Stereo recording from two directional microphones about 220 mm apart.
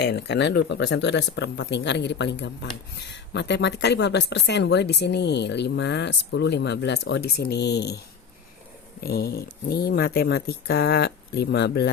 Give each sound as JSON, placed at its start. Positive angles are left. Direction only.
{"t": 0.0, "sound": "speech", "side_deg": 50}
{"t": 9.0, "sound": "speech", "side_deg": 45}